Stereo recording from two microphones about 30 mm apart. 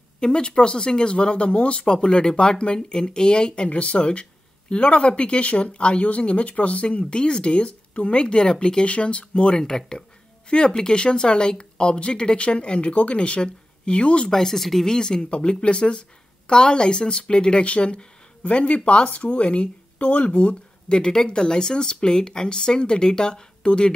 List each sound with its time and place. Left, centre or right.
0.2 s speech: left
8.8 s speech: left
9.6 s speech: centre; by 14.3 s left
14.3 s speech: centre
14.9 s speech: left
15.2 s speech: left
20.0 s speech: left
20.2 s speech: left
20.9 s speech: left